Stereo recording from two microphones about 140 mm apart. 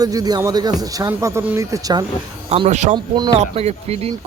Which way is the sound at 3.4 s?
50° right (ahead or behind).